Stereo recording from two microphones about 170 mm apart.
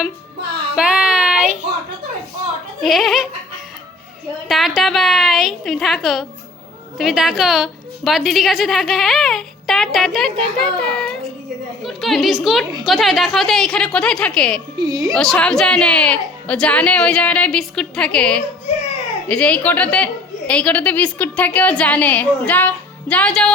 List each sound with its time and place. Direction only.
0.8 s child singing: 5° right (ahead or behind)
2.8 s a woman's voice: centre (ahead or behind)
4.4 s a woman's voice: centre (ahead or behind)
14.8 s a woman's voice: 20° right (ahead or behind)
15.1 s a woman's voice: 5° left (ahead or behind)